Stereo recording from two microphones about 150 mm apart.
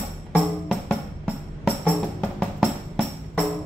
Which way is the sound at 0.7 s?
10° left (ahead or behind).